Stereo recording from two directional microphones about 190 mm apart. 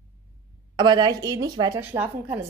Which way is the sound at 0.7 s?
20° right (ahead or behind).